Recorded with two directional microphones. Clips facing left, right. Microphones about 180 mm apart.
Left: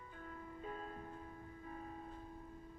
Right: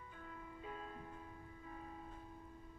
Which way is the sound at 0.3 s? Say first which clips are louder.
Left 3 dB; 45° left (ahead or behind).